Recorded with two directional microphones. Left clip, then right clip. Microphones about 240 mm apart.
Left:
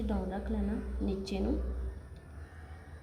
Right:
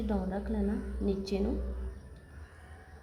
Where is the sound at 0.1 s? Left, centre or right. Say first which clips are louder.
Right 3 dB; centre.